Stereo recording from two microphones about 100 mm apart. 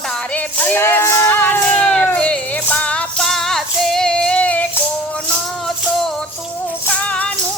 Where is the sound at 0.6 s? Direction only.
20° left (ahead or behind).